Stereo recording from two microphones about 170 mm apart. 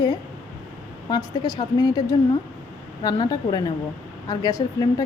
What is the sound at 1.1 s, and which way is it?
Speech, 25° left (ahead or behind).